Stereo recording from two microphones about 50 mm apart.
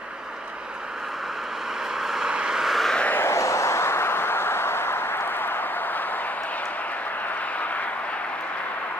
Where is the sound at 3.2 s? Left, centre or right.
Left.